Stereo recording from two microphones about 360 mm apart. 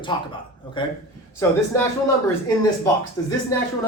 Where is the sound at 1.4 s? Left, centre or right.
Centre.